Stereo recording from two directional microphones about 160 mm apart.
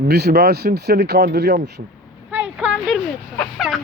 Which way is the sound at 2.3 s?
10° right (ahead or behind).